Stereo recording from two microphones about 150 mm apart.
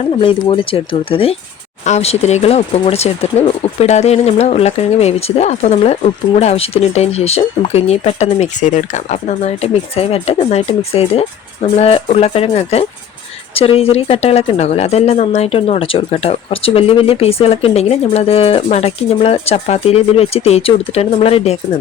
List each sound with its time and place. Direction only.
0.0 s speech: 35° left (ahead or behind)